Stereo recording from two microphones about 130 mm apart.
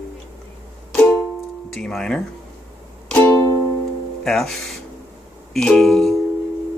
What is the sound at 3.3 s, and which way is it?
Music, 25° left (ahead or behind).